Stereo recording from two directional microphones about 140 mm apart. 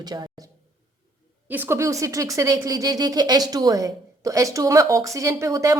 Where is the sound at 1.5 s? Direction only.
15° right (ahead or behind).